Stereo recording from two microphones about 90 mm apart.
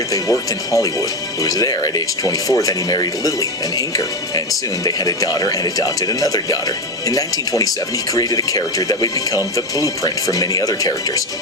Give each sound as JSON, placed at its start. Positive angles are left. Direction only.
{"t": 0.1, "sound": "speech", "side_deg": 40}